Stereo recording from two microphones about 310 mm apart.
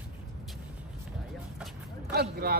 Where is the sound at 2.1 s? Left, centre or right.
Right.